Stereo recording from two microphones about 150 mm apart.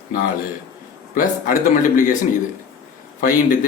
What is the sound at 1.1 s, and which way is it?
A man's voice, 65° left (ahead or behind).